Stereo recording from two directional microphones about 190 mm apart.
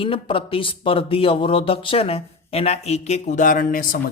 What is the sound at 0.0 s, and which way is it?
Speech, 30° left (ahead or behind).